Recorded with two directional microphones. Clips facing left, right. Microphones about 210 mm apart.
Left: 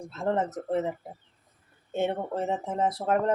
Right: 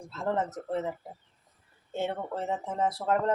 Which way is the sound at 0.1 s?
20° left (ahead or behind).